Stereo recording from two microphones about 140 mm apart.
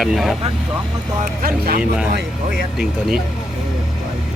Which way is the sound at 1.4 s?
90° right.